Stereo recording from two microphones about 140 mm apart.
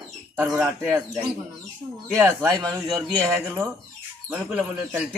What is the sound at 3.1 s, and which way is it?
Speech, 10° left (ahead or behind).